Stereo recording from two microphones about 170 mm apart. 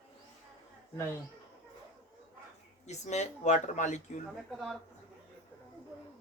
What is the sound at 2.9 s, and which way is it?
Speech, 40° left (ahead or behind).